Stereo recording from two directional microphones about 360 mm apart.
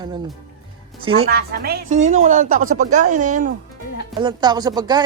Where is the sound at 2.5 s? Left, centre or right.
Right.